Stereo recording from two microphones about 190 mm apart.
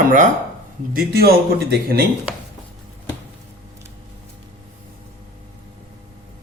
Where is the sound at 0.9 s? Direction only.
55° right (ahead or behind).